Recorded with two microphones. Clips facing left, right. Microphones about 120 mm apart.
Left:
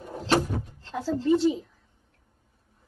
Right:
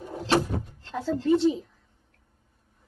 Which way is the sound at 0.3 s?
Centre (ahead or behind).